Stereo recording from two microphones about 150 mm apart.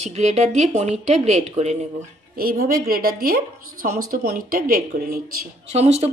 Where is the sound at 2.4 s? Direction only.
85° right; by 4.8 s 70° right (ahead or behind).